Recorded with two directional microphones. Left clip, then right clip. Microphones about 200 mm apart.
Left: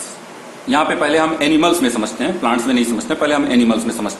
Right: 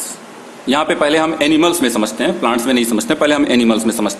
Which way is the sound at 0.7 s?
55° right (ahead or behind).